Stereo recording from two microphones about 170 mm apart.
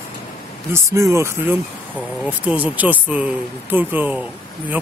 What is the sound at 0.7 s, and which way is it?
Speech, 15° right (ahead or behind).